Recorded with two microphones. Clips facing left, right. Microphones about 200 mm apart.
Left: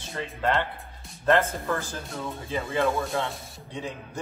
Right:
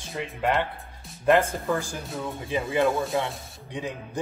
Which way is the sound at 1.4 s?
15° right (ahead or behind).